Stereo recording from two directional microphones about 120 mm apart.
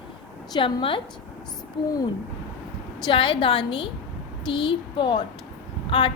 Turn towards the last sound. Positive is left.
turn(degrees=45)  # may be behind; listen again after turning